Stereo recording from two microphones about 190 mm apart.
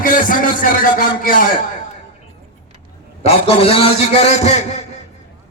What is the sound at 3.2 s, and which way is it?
A man's voice, 30° left (ahead or behind).